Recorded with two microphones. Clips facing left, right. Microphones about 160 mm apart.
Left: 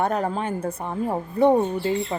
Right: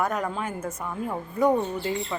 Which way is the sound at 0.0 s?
30° left (ahead or behind).